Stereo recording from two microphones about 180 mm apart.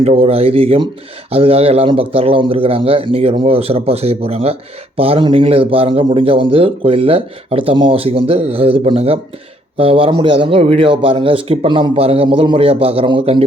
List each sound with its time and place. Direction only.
0.0 s speech: 35° right (ahead or behind)